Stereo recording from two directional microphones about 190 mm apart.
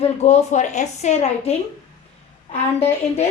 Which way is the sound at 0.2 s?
35° left (ahead or behind).